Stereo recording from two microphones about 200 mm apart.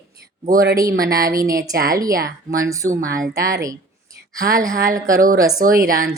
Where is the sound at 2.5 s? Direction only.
15° right (ahead or behind).